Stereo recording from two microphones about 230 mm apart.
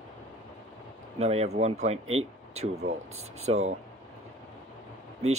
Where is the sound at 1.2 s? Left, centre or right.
Right.